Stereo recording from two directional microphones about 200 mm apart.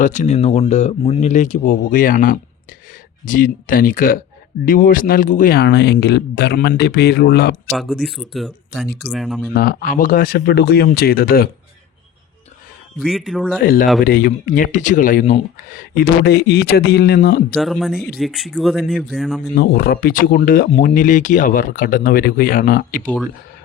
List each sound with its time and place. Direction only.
0.0 s speech: 35° left (ahead or behind); by 7.6 s 55° left (ahead or behind)
7.7 s speech: centre (ahead or behind)
9.6 s speech: 45° left (ahead or behind)
13.0 s speech: centre (ahead or behind)
13.6 s speech: 45° left (ahead or behind)
17.5 s speech: centre (ahead or behind)
19.5 s speech: 50° left (ahead or behind)